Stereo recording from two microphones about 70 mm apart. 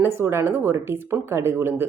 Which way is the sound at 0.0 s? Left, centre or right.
Right.